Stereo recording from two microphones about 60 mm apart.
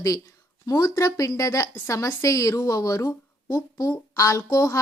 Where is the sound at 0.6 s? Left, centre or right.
Left.